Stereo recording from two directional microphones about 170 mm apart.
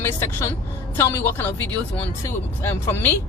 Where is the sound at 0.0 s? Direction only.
15° left (ahead or behind).